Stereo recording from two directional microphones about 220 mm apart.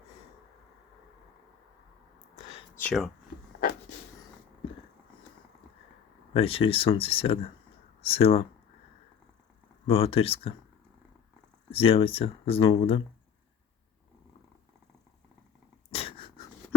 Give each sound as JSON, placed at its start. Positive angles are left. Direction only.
{"t": 2.7, "sound": "speech", "side_deg": 5}
{"t": 6.3, "sound": "speech", "side_deg": 25}
{"t": 9.8, "sound": "speech", "side_deg": 25}
{"t": 11.7, "sound": "speech", "side_deg": 25}
{"t": 15.9, "sound": "dog", "side_deg": 25}